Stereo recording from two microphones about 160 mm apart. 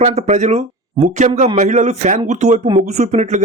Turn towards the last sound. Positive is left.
turn(degrees=-50)  # may be behind; listen again after turning